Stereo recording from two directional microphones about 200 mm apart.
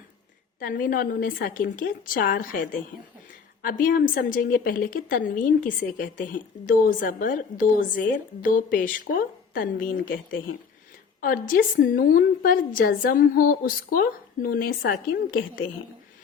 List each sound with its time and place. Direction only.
0.6 s a woman's voice: 45° left (ahead or behind)
3.6 s a woman's voice: 45° left (ahead or behind)